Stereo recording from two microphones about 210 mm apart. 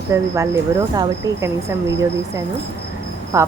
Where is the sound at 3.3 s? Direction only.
15° right (ahead or behind).